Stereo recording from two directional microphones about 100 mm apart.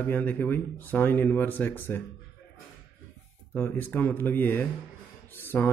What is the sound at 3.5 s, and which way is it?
Speech, 20° left (ahead or behind).